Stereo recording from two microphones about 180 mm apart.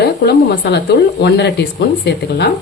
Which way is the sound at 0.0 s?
65° left (ahead or behind).